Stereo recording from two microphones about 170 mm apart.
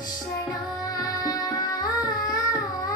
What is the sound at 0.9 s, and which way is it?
Music, 20° left (ahead or behind).